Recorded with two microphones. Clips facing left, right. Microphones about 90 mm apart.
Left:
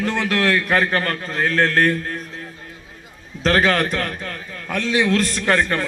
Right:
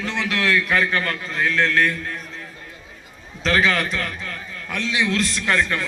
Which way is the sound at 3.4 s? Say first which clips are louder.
Left 3 dB; 45° left (ahead or behind).